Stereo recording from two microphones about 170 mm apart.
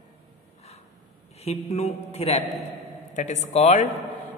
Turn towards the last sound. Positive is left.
turn(degrees=40)  # may be behind; listen again after turning